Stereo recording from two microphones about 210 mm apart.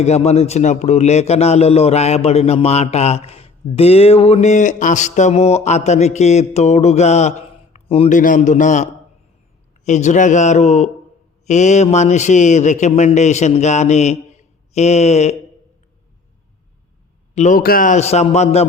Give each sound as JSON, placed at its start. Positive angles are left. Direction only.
{"t": 0.0, "sound": "a man's voice", "side_deg": 30}
{"t": 8.2, "sound": "a man's voice", "side_deg": 40}
{"t": 17.3, "sound": "a man's voice", "side_deg": 35}